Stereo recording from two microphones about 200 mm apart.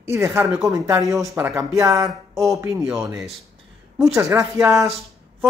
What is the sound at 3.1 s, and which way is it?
Speech, centre (ahead or behind).